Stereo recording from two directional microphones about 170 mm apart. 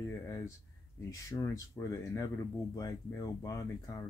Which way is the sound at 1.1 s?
15° left (ahead or behind).